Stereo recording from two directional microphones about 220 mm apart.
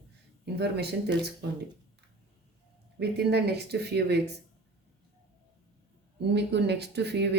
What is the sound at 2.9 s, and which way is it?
Speech, 50° right (ahead or behind).